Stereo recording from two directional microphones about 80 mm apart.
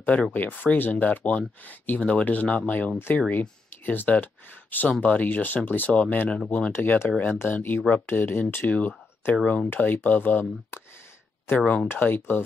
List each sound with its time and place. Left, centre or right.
0.0 s speech: centre